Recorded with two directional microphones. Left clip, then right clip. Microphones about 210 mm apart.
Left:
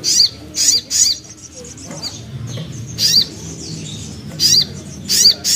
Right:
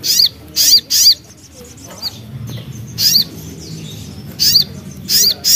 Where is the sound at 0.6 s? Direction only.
40° right (ahead or behind).